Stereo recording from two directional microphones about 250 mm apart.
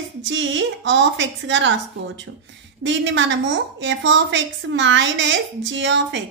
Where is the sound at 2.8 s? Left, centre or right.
Right.